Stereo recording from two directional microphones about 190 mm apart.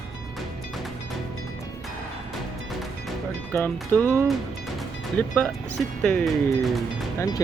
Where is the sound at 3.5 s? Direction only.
10° left (ahead or behind).